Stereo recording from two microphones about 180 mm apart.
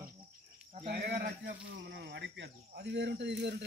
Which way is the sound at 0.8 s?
60° right (ahead or behind).